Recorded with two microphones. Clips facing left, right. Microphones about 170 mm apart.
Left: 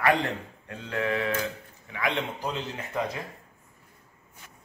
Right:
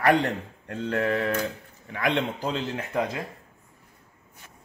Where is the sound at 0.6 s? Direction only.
50° right (ahead or behind).